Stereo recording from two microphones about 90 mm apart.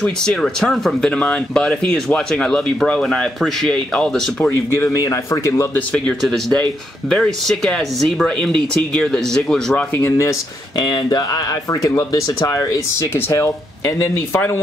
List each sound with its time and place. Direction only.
0.0 s speech: 5° left (ahead or behind)
4.5 s speech: 30° left (ahead or behind)
6.2 s speech: 5° left (ahead or behind)
9.9 s speech: 30° left (ahead or behind)
10.8 s speech: 50° left (ahead or behind); by 14.6 s 25° left (ahead or behind)